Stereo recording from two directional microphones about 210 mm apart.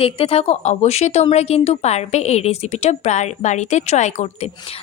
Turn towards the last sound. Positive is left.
turn(degrees=30)  # may be behind; listen again after turning